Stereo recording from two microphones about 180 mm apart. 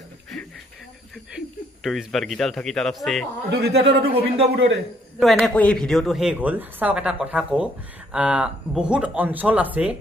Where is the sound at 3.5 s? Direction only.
65° right (ahead or behind).